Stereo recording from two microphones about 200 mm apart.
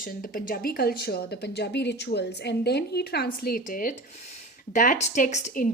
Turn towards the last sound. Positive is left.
turn(degrees=40)  # may be behind; listen again after turning